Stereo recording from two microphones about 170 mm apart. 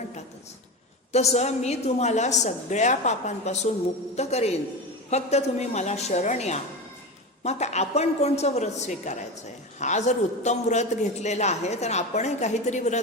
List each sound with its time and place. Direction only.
1.1 s a woman's voice: 40° left (ahead or behind)